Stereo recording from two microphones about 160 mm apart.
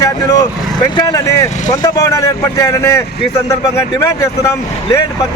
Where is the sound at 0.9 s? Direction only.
25° left (ahead or behind).